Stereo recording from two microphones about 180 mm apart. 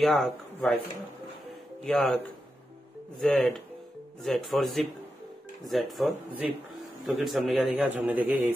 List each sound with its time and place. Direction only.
0.0 s a man's voice: centre (ahead or behind)
1.8 s a man's voice: 5° left (ahead or behind)
3.2 s a man's voice: centre (ahead or behind)